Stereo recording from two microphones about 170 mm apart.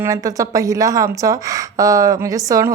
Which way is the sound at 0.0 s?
20° right (ahead or behind).